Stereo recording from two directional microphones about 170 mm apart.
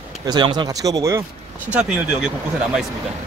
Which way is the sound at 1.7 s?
5° right (ahead or behind).